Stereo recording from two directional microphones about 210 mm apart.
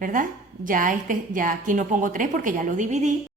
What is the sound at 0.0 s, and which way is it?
A woman's voice, 40° right (ahead or behind).